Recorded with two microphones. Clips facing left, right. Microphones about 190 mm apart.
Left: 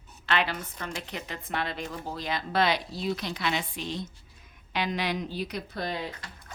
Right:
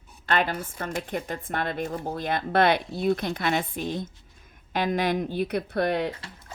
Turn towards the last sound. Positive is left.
turn(degrees=-65)  # may be behind; listen again after turning